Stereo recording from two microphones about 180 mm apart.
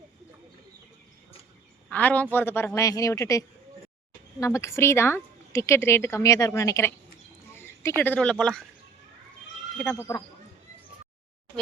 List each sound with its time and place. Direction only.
1.9 s a woman's voice: 10° left (ahead or behind)
7.5 s a sound: 15° left (ahead or behind)
8.0 s speech: 5° left (ahead or behind)
9.7 s a woman's voice: 5° left (ahead or behind)